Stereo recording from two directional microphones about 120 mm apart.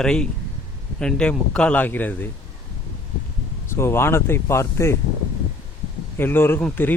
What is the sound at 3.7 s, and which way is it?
Speech, 20° left (ahead or behind).